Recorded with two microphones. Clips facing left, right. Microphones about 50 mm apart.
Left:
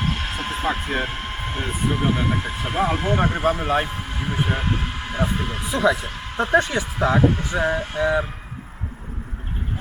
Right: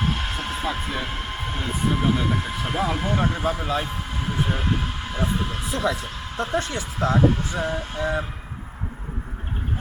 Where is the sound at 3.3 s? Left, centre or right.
Left.